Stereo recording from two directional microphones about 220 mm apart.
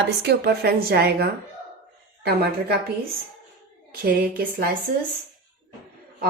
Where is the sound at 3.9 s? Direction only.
40° right (ahead or behind).